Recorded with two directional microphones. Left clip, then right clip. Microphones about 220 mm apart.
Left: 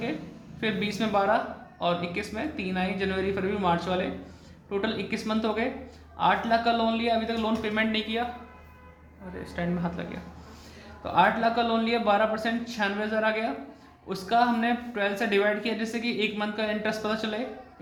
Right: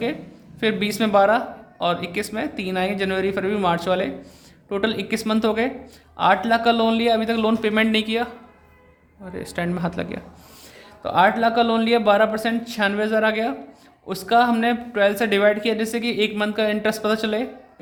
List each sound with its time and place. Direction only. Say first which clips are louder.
0.6 s speech: right 7 dB; 50° right (ahead or behind)
9.3 s speech: right 6 dB; 50° right (ahead or behind)